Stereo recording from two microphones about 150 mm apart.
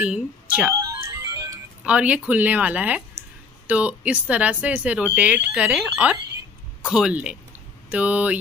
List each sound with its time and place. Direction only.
0.0 s speech: 5° right (ahead or behind)
0.7 s music: 20° right (ahead or behind)
1.9 s speech: 10° right (ahead or behind)